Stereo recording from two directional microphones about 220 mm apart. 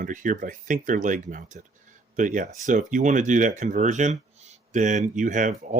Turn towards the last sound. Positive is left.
turn(degrees=-35)  # may be behind; listen again after turning